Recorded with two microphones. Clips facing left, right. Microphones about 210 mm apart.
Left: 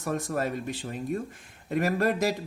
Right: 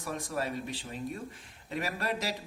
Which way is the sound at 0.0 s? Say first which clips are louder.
Left 6 dB; 45° left (ahead or behind).